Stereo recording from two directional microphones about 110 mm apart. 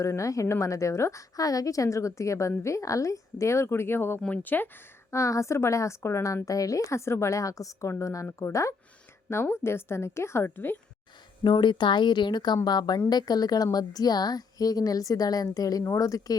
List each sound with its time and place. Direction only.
0.0 s a woman's voice: 30° left (ahead or behind)
5.1 s a woman's voice: 30° left (ahead or behind)
11.4 s a woman's voice: 45° left (ahead or behind)